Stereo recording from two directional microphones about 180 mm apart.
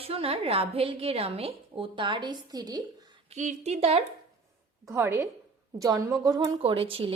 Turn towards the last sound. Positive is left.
turn(degrees=-30)  # may be behind; listen again after turning